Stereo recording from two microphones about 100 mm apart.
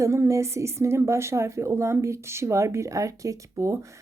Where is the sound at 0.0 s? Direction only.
30° right (ahead or behind).